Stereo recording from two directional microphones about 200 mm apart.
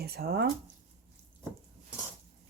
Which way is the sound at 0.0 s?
50° right (ahead or behind).